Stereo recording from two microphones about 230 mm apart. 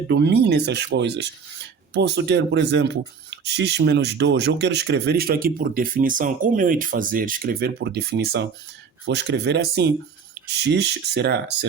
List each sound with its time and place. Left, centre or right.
0.1 s speech: right